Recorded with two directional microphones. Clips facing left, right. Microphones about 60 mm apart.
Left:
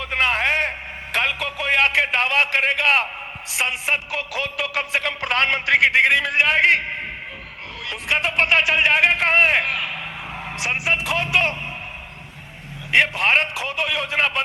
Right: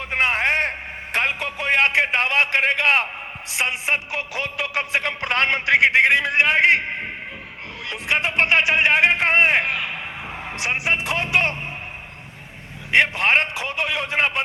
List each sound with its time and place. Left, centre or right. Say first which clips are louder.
0.0 s a sound: even; right
1.1 s a man's voice: even; right
12.9 s speech: even; right